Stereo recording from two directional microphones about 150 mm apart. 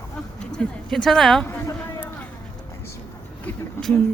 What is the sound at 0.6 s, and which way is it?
Speech, 5° left (ahead or behind).